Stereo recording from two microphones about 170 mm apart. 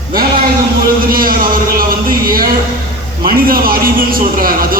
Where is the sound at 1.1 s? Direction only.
55° right (ahead or behind).